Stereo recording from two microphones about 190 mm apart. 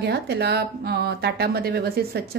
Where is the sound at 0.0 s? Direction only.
60° right (ahead or behind).